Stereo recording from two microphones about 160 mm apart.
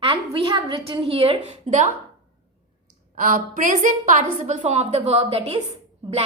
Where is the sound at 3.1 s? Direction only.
60° right (ahead or behind); by 5.6 s 35° right (ahead or behind).